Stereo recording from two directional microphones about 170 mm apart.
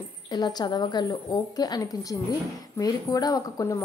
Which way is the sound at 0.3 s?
25° left (ahead or behind).